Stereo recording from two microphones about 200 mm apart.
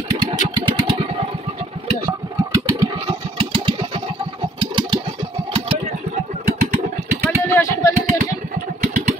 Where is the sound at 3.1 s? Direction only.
25° right (ahead or behind).